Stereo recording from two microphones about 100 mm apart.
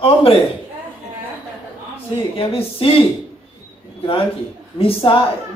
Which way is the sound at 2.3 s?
70° left (ahead or behind).